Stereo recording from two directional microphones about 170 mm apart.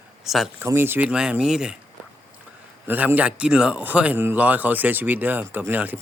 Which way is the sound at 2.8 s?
10° right (ahead or behind).